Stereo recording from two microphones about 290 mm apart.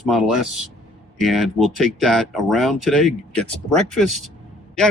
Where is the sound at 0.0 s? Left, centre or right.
Centre.